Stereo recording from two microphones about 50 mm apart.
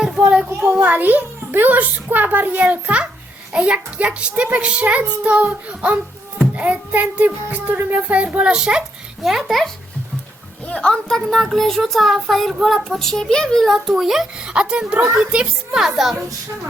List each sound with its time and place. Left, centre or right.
0.0 s a sound: centre
0.7 s a child's voice: right
6.6 s child singing: right
8.1 s a child's voice: right
9.2 s speech: centre
10.7 s speech: left
13.7 s a child's voice: centre
14.4 s a child's voice: centre
15.8 s a child's voice: centre